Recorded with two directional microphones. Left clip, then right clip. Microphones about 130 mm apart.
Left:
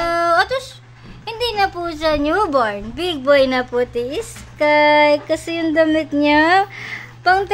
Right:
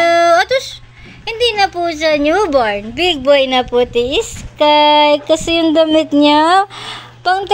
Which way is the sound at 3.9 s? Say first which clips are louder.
Right 8 dB; 15° left (ahead or behind).